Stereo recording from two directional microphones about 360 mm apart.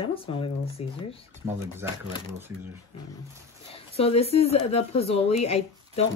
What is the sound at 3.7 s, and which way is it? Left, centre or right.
Speech, centre.